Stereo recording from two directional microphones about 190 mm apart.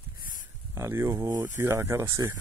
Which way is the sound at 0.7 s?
15° right (ahead or behind).